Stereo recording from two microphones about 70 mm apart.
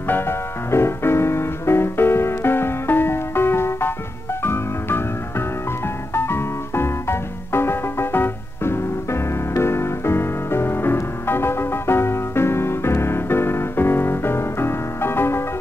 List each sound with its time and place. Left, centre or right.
0.0 s music: left
6.1 s music: left